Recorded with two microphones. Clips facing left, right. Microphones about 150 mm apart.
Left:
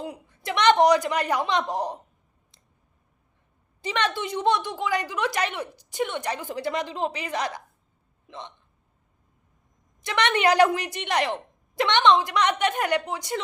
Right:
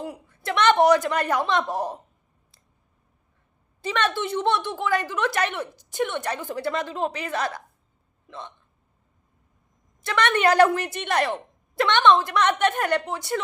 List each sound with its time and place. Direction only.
0.0 s a woman's voice: 15° left (ahead or behind)
3.8 s a woman's voice: 15° left (ahead or behind)
7.0 s speech: 50° right (ahead or behind)
7.3 s a woman's voice: 15° left (ahead or behind)
10.0 s a woman's voice: 15° left (ahead or behind)